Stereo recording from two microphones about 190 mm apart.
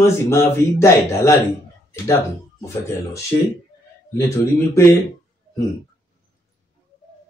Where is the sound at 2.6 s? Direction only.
15° left (ahead or behind).